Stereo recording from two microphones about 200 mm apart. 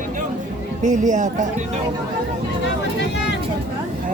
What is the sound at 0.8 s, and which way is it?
Speech, 40° right (ahead or behind).